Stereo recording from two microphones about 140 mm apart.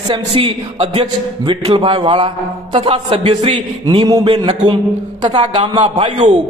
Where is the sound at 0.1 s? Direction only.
40° right (ahead or behind).